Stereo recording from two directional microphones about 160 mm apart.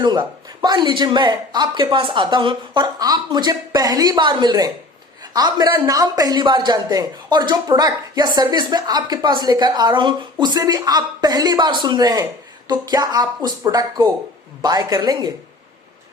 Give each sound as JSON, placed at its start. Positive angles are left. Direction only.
{"t": 0.0, "sound": "speech", "side_deg": -25}